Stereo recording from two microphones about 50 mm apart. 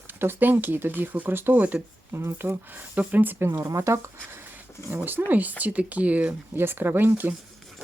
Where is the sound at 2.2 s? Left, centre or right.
Right.